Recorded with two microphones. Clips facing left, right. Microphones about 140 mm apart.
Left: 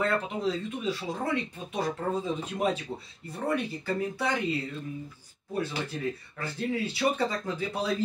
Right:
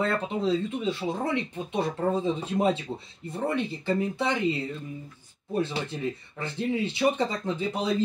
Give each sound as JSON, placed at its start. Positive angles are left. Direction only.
{"t": 0.0, "sound": "speech", "side_deg": -25}